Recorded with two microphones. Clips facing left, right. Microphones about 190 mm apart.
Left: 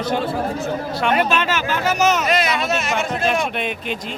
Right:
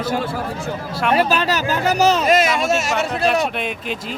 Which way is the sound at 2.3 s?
45° right (ahead or behind).